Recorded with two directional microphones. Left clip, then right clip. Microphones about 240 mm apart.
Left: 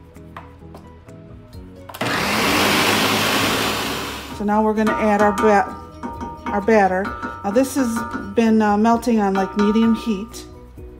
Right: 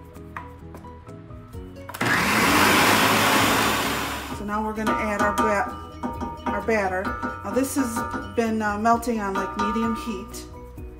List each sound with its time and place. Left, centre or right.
1.9 s vacuum cleaner: centre
4.8 s music: centre
6.5 s speech: left
7.0 s speech: centre
8.4 s speech: left
9.3 s music: centre